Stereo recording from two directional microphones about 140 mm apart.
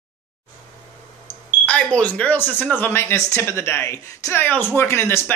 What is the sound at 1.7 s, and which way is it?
Speech, 10° left (ahead or behind).